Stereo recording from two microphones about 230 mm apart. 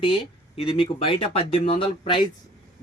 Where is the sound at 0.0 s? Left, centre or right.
Left.